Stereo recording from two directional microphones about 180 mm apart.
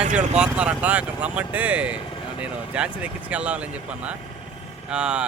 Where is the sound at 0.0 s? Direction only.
40° right (ahead or behind).